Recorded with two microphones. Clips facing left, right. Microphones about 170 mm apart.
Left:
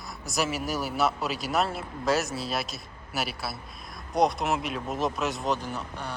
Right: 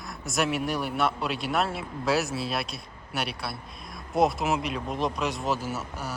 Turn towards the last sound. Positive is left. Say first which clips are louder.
# right 2 dB
turn(degrees=-5)  # may be behind; listen again after turning